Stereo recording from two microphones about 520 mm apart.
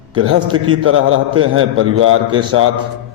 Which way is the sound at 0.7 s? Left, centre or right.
Right.